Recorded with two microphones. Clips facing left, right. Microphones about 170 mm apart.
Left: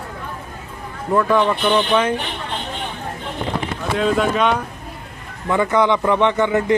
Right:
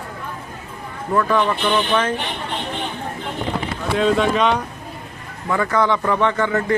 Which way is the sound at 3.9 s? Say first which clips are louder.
Right 1 dB; centre (ahead or behind).